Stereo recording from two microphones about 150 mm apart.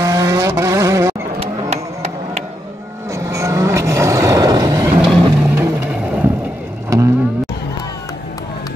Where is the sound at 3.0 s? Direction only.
20° right (ahead or behind).